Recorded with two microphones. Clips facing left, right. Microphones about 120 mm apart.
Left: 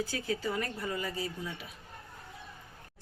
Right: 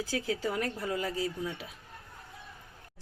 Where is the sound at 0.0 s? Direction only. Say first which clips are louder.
Right 1 dB; 90° right.